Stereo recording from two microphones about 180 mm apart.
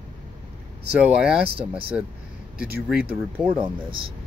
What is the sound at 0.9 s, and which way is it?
Speech, 5° right (ahead or behind).